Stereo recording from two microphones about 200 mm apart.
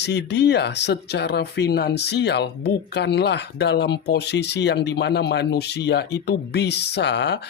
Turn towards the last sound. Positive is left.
turn(degrees=60)  # may be behind; listen again after turning